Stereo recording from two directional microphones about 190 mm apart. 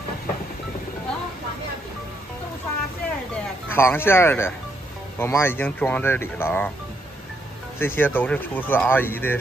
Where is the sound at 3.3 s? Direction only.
10° left (ahead or behind).